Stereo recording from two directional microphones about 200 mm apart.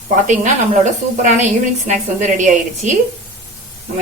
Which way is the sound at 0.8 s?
35° right (ahead or behind).